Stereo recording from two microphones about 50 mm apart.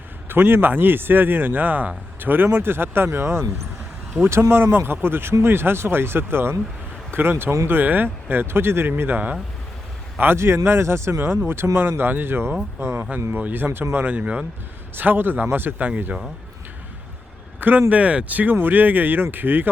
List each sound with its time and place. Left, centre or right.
0.3 s speech: right
10.3 s speech: right
14.9 s speech: right
17.6 s speech: right